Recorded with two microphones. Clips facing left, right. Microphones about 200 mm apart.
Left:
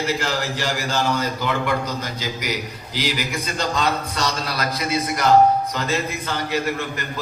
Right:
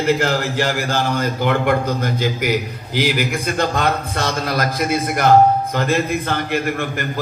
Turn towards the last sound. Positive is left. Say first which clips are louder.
# right 3 dB
turn(degrees=-55)  # may be behind; listen again after turning